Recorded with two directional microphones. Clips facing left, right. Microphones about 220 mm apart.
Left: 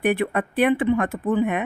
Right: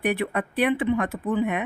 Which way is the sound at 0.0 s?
50° left (ahead or behind).